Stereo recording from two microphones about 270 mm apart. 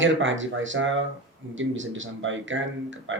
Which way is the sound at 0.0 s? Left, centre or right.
Right.